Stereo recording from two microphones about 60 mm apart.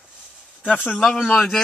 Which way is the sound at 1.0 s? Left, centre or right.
Centre.